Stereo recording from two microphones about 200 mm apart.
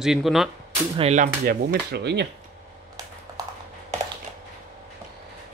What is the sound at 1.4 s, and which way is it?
Speech, 55° right (ahead or behind).